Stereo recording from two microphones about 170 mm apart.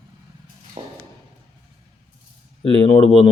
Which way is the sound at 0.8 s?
40° right (ahead or behind).